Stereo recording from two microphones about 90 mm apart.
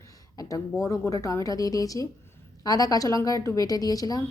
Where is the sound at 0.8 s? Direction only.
35° left (ahead or behind).